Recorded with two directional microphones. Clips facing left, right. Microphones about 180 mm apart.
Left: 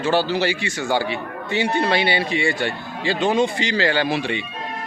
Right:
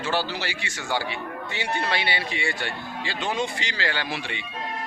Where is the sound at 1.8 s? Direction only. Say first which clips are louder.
Left 7 dB; 30° left (ahead or behind).